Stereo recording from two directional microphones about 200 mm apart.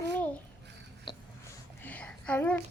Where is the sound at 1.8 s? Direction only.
5° left (ahead or behind).